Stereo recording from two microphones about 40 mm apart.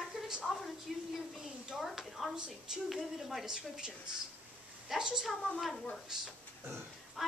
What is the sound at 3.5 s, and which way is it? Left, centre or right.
A woman's voice, centre.